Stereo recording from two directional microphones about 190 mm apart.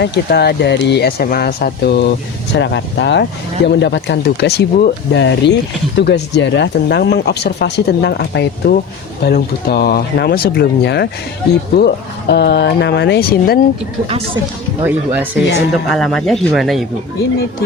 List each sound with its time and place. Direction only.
0.0 s speech: 60° left (ahead or behind)
2.5 s speech: 70° left (ahead or behind)
14.8 s speech: 10° right (ahead or behind)
15.9 s speech: centre (ahead or behind)